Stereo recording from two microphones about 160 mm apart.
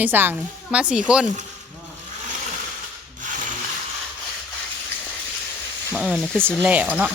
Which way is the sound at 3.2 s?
55° right (ahead or behind).